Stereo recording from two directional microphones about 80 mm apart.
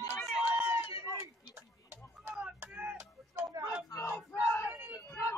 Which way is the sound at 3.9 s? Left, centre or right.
Left.